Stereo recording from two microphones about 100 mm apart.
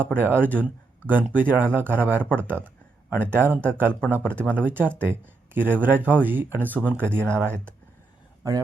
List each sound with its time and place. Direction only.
0.0 s speech: 20° right (ahead or behind)